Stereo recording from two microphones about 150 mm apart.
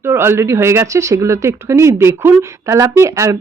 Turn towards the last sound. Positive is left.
turn(degrees=-20)  # may be behind; listen again after turning